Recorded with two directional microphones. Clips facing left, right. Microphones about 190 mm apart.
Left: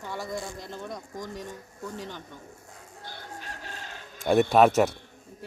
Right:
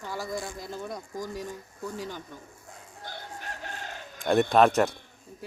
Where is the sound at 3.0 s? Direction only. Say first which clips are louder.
Right 2 dB; 50° right (ahead or behind).